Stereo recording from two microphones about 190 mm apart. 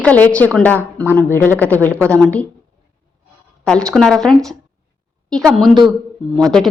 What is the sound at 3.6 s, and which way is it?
Speech, 5° left (ahead or behind).